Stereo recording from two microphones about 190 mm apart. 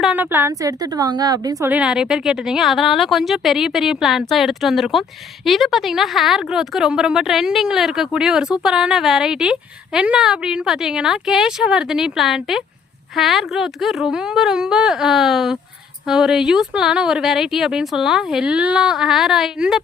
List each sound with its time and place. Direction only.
0.0 s a woman's voice: 10° right (ahead or behind)
1.7 s a woman's voice: 5° right (ahead or behind)